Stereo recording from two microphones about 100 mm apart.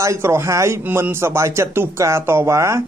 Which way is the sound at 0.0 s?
30° right (ahead or behind).